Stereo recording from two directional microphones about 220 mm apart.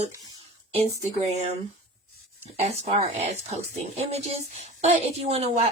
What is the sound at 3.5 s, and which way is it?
Speech, 30° right (ahead or behind).